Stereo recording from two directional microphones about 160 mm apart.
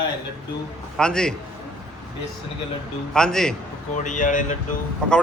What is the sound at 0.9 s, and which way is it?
Speech, 5° left (ahead or behind).